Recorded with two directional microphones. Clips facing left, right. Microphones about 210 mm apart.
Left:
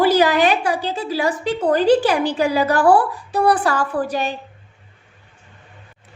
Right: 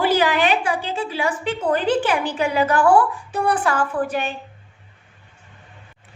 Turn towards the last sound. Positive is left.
turn(degrees=35)  # may be behind; listen again after turning